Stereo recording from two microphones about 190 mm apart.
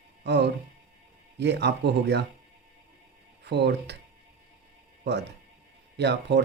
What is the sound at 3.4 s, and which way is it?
Speech, 65° right (ahead or behind).